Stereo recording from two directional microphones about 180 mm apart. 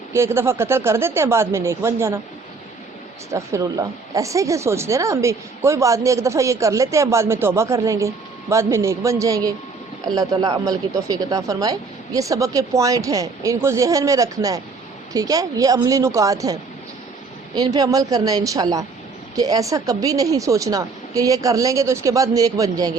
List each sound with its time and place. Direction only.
0.1 s speech: 15° right (ahead or behind)
3.3 s speech: 20° right (ahead or behind)